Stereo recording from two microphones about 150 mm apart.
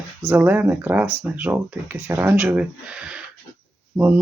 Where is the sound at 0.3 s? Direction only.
10° right (ahead or behind).